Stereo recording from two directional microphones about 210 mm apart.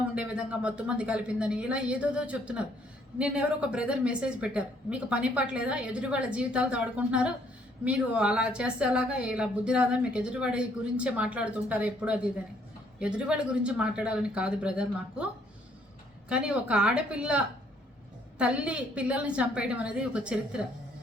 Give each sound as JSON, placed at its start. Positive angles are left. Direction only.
{"t": 0.1, "sound": "speech", "side_deg": -5}
{"t": 16.3, "sound": "speech", "side_deg": -5}